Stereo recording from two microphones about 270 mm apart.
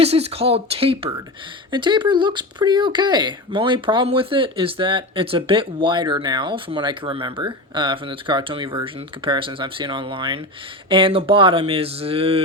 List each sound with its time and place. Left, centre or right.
0.0 s speech: right